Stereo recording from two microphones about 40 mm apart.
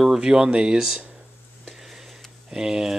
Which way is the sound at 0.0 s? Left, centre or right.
Centre.